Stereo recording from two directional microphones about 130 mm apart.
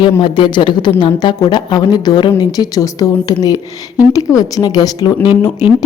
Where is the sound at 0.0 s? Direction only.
35° left (ahead or behind).